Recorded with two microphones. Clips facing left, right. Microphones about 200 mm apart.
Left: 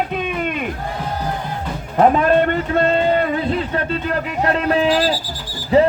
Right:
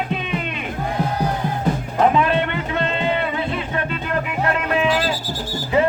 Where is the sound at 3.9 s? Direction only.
35° left (ahead or behind).